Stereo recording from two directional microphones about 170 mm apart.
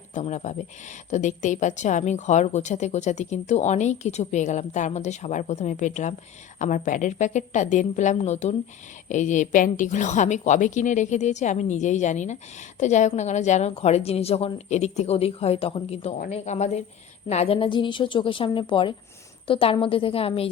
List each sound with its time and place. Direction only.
0.1 s a woman's voice: 45° left (ahead or behind)